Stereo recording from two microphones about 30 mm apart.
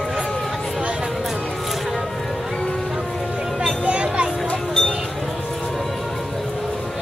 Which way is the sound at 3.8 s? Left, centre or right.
Right.